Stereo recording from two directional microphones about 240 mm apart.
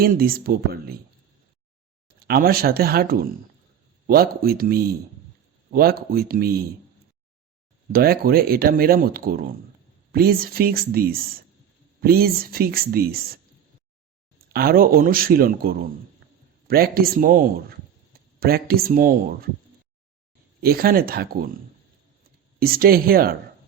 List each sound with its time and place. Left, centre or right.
0.0 s speech: right
2.0 s speech: right
7.9 s speech: right
14.5 s speech: right
20.6 s speech: right
22.6 s speech: right